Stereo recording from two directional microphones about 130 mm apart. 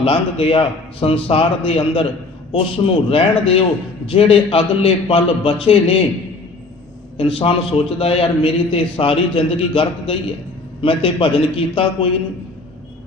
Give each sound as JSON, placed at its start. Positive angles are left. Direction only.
{"t": 0.0, "sound": "a man's voice", "side_deg": 45}
{"t": 7.2, "sound": "a man's voice", "side_deg": 45}